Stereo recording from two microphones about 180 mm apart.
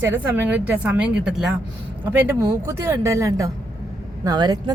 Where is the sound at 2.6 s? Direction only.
15° right (ahead or behind).